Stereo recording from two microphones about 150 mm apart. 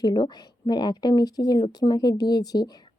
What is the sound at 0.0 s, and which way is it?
Speech, 30° left (ahead or behind).